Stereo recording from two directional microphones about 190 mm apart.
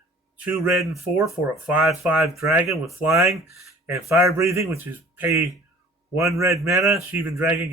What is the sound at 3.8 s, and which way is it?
Speech, 10° right (ahead or behind).